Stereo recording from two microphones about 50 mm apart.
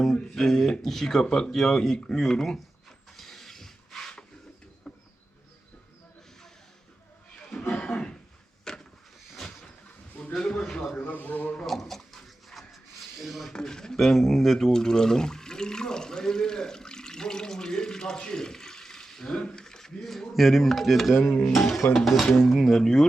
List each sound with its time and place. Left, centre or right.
0.0 s speech: centre
3.2 s a sound: centre
4.9 s insect: centre
7.7 s a sound: centre
8.7 s vehicle: centre
10.3 s speech: centre
11.0 s a man's voice: left
11.6 s a sound: centre
13.5 s speech: centre